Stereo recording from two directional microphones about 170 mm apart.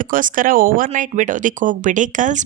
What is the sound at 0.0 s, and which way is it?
Speech, 50° right (ahead or behind).